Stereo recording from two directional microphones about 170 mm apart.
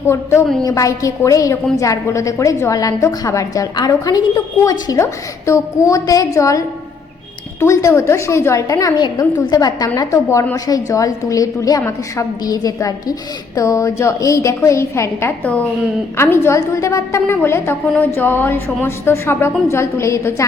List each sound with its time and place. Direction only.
0.1 s a woman's voice: 15° left (ahead or behind)